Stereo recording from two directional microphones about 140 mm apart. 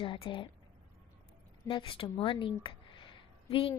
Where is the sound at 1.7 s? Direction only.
35° left (ahead or behind).